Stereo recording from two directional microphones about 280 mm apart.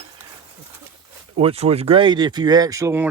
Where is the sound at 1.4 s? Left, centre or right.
Right.